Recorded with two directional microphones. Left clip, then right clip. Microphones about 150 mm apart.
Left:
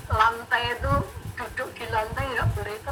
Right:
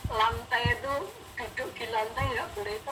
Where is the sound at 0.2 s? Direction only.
30° left (ahead or behind).